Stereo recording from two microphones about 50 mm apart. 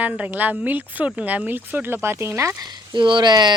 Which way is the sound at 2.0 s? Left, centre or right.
Right.